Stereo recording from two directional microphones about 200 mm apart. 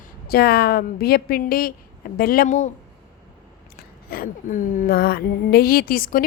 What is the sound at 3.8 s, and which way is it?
Speech, 45° left (ahead or behind).